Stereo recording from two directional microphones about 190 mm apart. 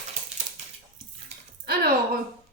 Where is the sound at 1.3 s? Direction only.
35° right (ahead or behind).